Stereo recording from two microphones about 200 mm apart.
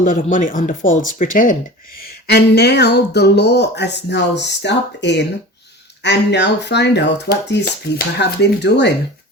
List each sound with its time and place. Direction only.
0.0 s speech: 40° left (ahead or behind)
2.2 s speech: 55° left (ahead or behind)